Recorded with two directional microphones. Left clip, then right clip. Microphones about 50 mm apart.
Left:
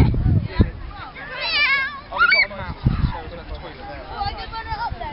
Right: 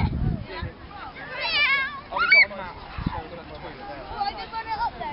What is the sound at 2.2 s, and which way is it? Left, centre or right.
Honk, left.